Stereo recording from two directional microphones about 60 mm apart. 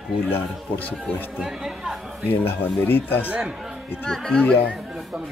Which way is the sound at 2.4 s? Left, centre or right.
Left.